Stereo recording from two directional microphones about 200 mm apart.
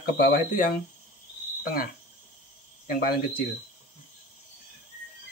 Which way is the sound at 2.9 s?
45° left (ahead or behind).